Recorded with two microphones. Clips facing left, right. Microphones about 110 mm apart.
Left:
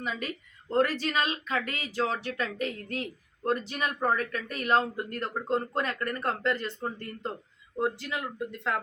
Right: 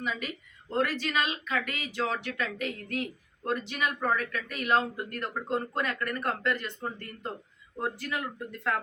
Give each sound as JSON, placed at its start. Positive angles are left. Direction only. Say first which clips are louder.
{"t": 0.7, "sound": "speech", "louder": "left 3 dB", "side_deg": 35}